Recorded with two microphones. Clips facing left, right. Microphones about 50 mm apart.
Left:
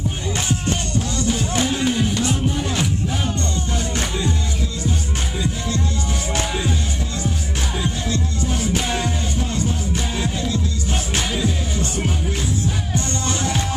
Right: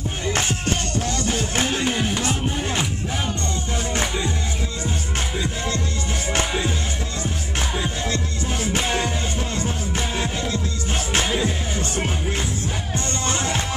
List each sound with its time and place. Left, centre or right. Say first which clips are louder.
0.3 s music: right 1 dB; right
8.1 s music: left 2 dB; right